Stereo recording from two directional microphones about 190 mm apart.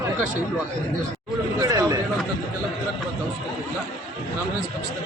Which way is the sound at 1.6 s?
20° right (ahead or behind).